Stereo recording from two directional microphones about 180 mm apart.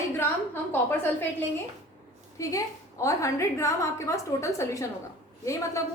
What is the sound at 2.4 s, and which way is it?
A woman's voice, 15° left (ahead or behind).